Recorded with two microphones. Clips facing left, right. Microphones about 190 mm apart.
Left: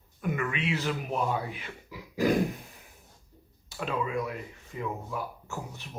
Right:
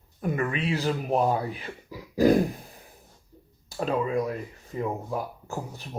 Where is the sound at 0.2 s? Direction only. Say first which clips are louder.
Right 3 dB; 35° right (ahead or behind).